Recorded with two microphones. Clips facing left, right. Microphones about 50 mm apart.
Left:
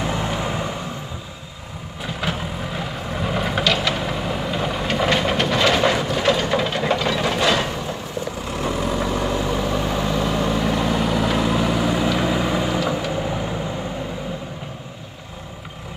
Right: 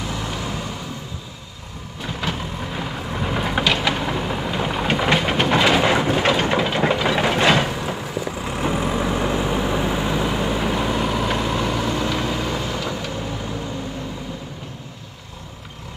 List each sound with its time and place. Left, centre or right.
0.0 s vehicle: left
2.0 s vehicle: centre
4.9 s train: centre
5.6 s vehicle: centre
6.9 s a sound: centre
7.3 s a sound: right
8.5 s vehicle: centre; by 13.6 s left